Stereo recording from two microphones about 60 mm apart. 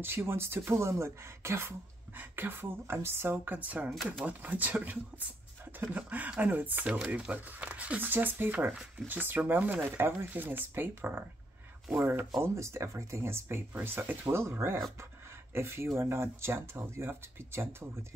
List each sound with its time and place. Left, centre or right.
0.0 s speech: right
2.1 s speech: right
9.8 s speech: right
12.4 s speech: right